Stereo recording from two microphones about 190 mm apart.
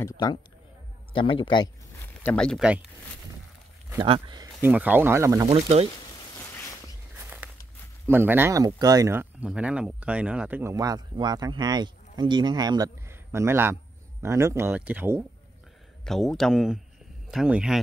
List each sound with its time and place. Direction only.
0.0 s a man's voice: 20° left (ahead or behind)
2.0 s speech: 5° left (ahead or behind)
4.0 s speech: 25° right (ahead or behind)
4.6 s speech: 10° right (ahead or behind)
5.5 s speech: 35° right (ahead or behind)
6.5 s a sound: 15° left (ahead or behind)
7.4 s a sound: 5° right (ahead or behind)
8.1 s speech: 10° right (ahead or behind)
16.0 s speech: centre (ahead or behind)